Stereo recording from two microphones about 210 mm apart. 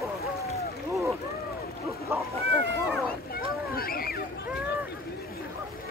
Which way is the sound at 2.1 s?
10° right (ahead or behind).